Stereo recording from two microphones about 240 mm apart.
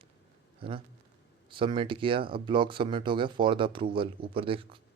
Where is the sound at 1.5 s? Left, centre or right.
Right.